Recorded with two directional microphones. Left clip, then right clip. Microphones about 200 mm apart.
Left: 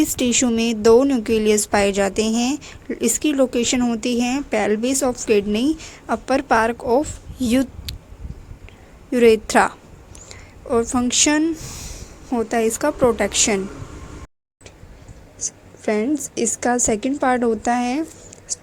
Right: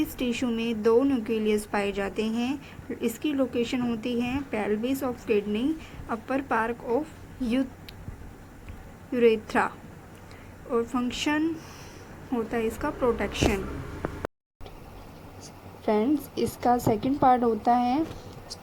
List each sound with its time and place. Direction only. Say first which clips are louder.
0.0 s a woman's voice: left 10 dB; 60° left (ahead or behind)
2.1 s a woman's voice: left 9 dB; 60° left (ahead or behind)
9.1 s a woman's voice: left 8 dB; 55° left (ahead or behind)
11.2 s a woman's voice: left 10 dB; 55° left (ahead or behind)
12.3 s a woman's voice: left 9 dB; 45° left (ahead or behind)
15.4 s a sound: left 18 dB; 25° left (ahead or behind)
16.0 s a woman's voice: left 5 dB; 25° left (ahead or behind)